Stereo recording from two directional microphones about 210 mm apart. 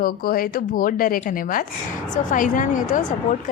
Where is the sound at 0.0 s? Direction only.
45° left (ahead or behind).